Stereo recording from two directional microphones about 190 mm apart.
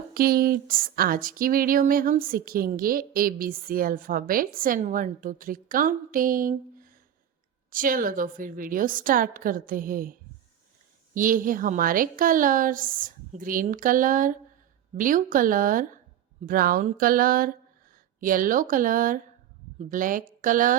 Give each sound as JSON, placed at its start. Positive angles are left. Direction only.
{"t": 0.1, "sound": "speech", "side_deg": -50}